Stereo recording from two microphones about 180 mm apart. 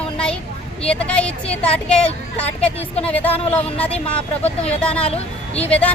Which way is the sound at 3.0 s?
10° left (ahead or behind).